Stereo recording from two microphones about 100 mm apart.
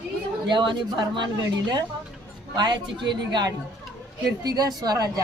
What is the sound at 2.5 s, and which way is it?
Speech, 50° right (ahead or behind).